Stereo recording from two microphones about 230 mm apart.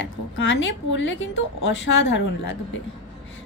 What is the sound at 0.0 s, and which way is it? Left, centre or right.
A woman's voice, left.